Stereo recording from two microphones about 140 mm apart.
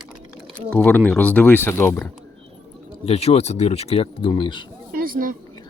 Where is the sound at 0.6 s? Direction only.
10° left (ahead or behind).